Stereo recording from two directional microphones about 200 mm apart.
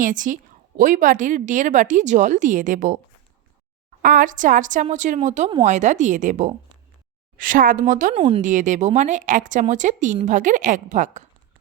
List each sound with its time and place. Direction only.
0.0 s speech: 40° right (ahead or behind)
4.0 s speech: 45° right (ahead or behind)